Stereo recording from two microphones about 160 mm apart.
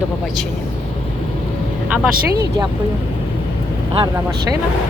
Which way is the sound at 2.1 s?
85° right.